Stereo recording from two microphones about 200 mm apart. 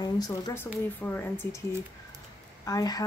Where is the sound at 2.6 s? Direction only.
20° left (ahead or behind).